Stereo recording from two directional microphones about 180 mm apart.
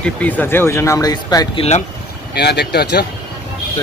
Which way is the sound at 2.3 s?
65° left (ahead or behind).